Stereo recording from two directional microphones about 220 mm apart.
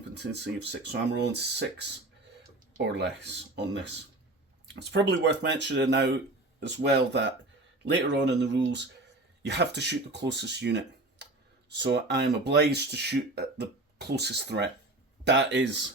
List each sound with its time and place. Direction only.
0.2 s speech: 50° right (ahead or behind)
2.8 s speech: 50° right (ahead or behind)